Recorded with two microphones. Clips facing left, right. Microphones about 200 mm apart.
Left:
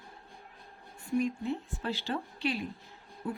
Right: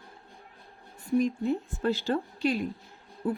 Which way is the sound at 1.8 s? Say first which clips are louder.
Right 7 dB; 45° right (ahead or behind).